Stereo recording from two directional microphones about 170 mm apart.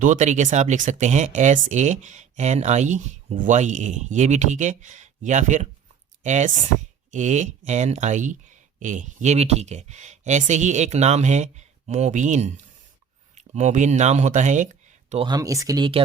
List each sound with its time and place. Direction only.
0.0 s speech: 45° right (ahead or behind)
15.3 s speech: 20° right (ahead or behind)